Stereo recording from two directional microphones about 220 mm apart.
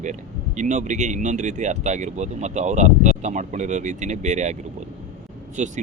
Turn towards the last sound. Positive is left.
turn(degrees=-35)  # may be behind; listen again after turning